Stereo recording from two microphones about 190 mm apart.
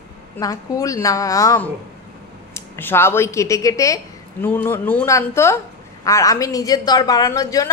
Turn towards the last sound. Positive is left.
turn(degrees=15)  # may be behind; listen again after turning